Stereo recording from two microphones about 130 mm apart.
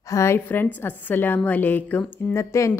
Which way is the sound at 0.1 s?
20° left (ahead or behind).